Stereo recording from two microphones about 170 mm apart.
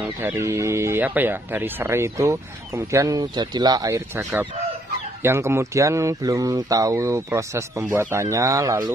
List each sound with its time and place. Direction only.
0.2 s speech: 15° right (ahead or behind)